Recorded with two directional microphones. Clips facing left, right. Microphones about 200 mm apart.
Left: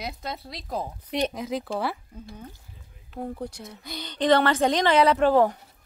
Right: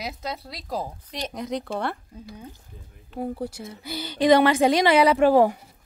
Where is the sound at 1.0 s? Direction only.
60° left (ahead or behind).